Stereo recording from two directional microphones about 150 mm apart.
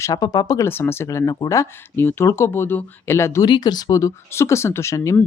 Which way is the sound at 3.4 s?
30° left (ahead or behind).